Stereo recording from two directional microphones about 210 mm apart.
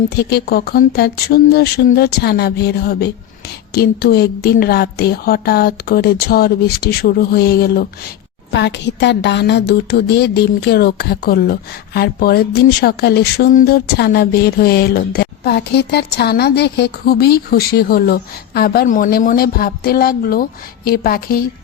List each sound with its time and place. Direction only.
0.2 s a woman's voice: 50° left (ahead or behind)